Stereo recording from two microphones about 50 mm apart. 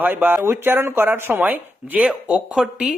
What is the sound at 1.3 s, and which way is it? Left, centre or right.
Speech, right.